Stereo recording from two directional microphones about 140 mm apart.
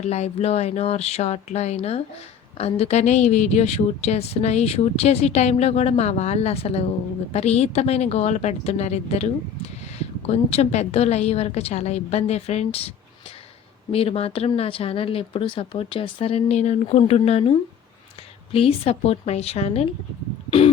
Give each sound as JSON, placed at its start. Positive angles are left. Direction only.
{"t": 0.0, "sound": "a woman's voice", "side_deg": 50}
{"t": 13.9, "sound": "a woman's voice", "side_deg": 45}
{"t": 18.5, "sound": "a woman's voice", "side_deg": 45}